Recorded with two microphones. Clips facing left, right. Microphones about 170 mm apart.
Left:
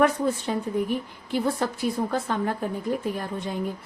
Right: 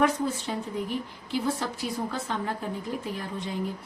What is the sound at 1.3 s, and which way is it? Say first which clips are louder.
A woman's voice: left 4 dB; 55° left (ahead or behind).